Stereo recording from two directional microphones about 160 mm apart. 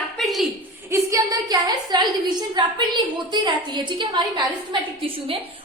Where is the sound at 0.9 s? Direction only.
20° right (ahead or behind).